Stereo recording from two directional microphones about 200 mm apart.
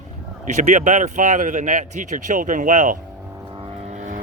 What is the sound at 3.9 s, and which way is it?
Vehicle, 35° right (ahead or behind).